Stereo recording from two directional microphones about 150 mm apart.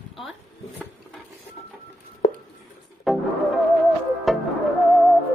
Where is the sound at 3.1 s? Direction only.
Centre (ahead or behind).